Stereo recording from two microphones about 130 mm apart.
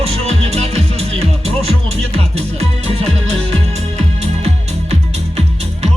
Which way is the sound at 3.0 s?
55° right (ahead or behind).